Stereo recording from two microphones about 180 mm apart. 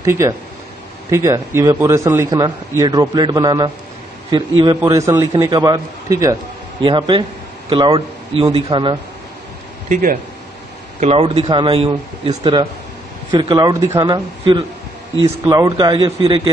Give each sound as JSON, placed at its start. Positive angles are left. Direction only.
{"t": 0.0, "sound": "a man's voice", "side_deg": -15}
{"t": 11.0, "sound": "a man's voice", "side_deg": -35}